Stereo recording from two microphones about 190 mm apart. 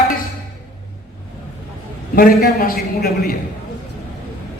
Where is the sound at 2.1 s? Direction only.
50° left (ahead or behind).